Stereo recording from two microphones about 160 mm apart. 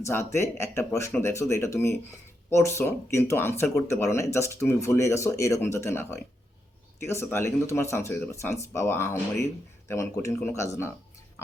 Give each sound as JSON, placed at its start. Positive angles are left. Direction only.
{"t": 0.0, "sound": "speech", "side_deg": 15}